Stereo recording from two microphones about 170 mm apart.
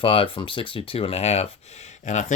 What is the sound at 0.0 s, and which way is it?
Speech, 35° left (ahead or behind).